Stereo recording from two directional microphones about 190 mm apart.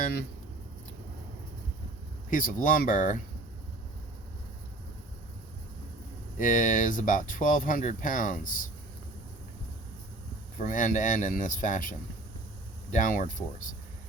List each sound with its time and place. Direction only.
2.3 s speech: 45° left (ahead or behind)
6.4 s speech: 45° left (ahead or behind)
10.6 s speech: 45° left (ahead or behind)